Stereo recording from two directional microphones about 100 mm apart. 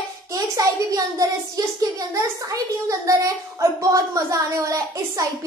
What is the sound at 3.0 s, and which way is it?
A child's voice, 35° right (ahead or behind).